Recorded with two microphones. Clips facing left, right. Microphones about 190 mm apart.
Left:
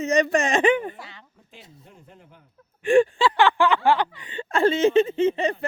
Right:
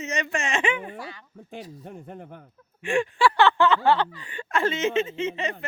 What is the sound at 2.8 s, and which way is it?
Speech, 35° left (ahead or behind).